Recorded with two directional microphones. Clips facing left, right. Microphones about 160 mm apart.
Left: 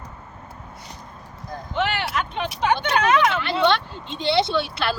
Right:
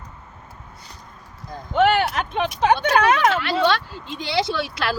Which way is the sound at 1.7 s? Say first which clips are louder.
Right 7 dB; 50° right (ahead or behind).